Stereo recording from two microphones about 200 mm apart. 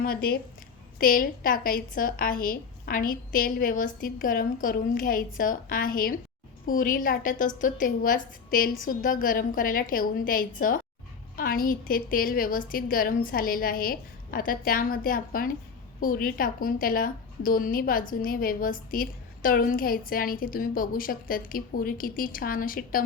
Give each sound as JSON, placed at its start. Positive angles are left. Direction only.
{"t": 0.0, "sound": "a woman's voice", "side_deg": 50}